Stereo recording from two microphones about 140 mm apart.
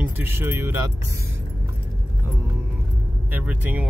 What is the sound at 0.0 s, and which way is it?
Speech, 15° right (ahead or behind).